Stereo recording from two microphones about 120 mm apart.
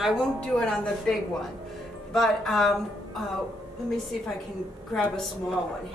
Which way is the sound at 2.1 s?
Centre (ahead or behind).